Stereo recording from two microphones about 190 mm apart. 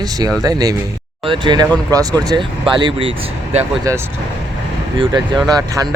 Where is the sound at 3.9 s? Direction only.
15° right (ahead or behind).